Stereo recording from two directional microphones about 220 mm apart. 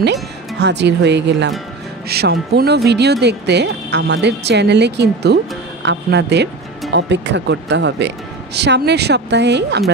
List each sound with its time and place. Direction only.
0.0 s speech: 50° right (ahead or behind)